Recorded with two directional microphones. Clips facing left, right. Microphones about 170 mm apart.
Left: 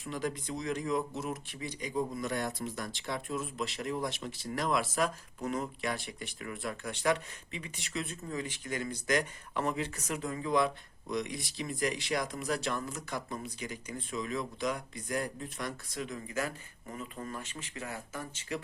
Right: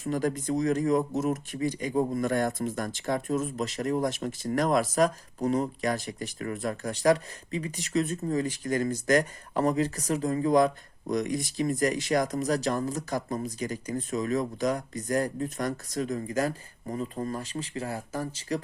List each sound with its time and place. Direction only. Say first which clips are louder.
0.0 s speech: right 8 dB; 45° right (ahead or behind)